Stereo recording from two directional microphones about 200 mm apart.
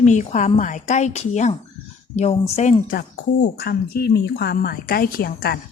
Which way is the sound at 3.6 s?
50° left (ahead or behind).